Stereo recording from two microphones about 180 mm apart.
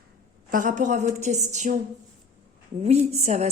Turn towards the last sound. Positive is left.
turn(degrees=-40)  # may be behind; listen again after turning